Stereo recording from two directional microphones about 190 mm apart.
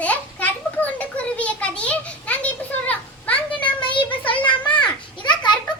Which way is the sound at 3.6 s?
25° left (ahead or behind).